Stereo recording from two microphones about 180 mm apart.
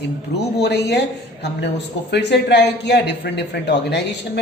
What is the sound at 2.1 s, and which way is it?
A man's voice, 70° left (ahead or behind).